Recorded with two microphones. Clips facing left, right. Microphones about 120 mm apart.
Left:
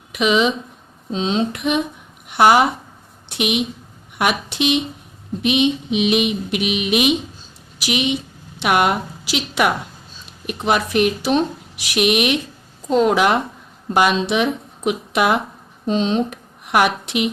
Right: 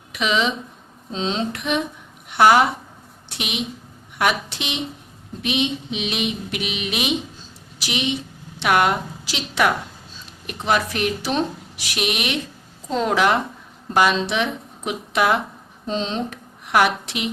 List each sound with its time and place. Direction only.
0.1 s a woman's voice: 15° left (ahead or behind)